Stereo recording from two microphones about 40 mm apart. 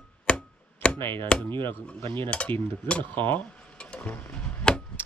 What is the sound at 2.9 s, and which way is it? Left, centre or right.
Speech, left.